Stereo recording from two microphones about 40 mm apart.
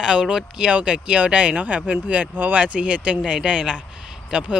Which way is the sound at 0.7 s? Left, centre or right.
Right.